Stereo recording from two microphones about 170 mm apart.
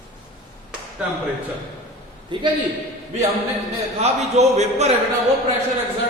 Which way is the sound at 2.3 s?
30° right (ahead or behind).